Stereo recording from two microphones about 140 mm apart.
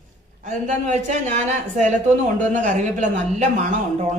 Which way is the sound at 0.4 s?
60° right (ahead or behind).